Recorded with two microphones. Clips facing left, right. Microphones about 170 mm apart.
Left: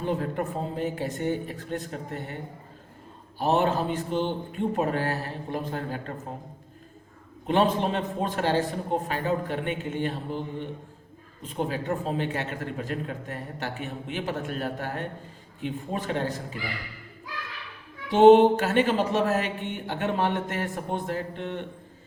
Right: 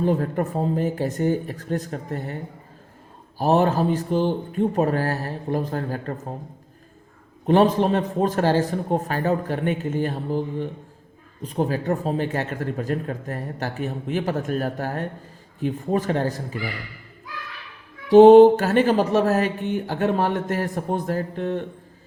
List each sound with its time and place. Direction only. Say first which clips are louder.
0.0 s speech: right 6 dB; 40° right (ahead or behind)
7.4 s speech: right 6 dB; 40° right (ahead or behind)
18.1 s speech: right 6 dB; 40° right (ahead or behind)